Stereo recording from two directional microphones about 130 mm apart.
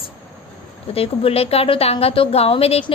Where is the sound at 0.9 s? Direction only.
45° left (ahead or behind).